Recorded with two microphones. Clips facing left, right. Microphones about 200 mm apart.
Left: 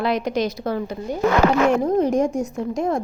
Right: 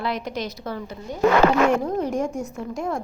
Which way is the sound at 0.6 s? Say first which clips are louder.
Left 7 dB; 45° left (ahead or behind).